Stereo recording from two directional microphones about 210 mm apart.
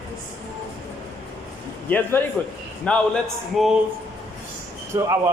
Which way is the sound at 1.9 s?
10° left (ahead or behind).